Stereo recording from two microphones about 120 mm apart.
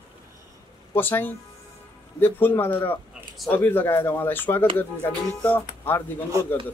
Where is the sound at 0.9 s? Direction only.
15° left (ahead or behind).